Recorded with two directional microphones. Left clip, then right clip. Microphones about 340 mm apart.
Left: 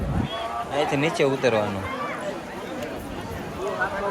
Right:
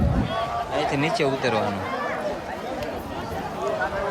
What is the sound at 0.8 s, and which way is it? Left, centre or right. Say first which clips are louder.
Speech: left 2 dB; centre.